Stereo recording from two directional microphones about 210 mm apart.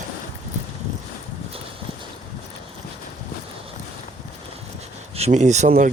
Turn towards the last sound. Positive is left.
turn(degrees=-35)  # may be behind; listen again after turning